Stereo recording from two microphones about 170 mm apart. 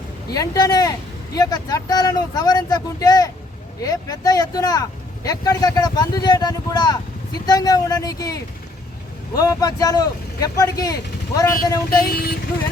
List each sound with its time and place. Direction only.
0.3 s speech: 20° left (ahead or behind)
12.1 s speech: 65° left (ahead or behind)